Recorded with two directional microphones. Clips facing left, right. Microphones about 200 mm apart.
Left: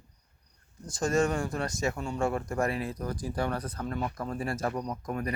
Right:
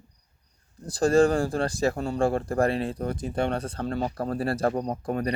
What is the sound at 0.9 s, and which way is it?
Speech, 35° right (ahead or behind).